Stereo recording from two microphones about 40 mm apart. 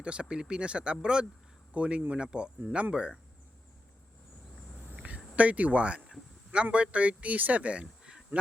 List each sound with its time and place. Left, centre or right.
0.0 s speech: right
5.0 s speech: right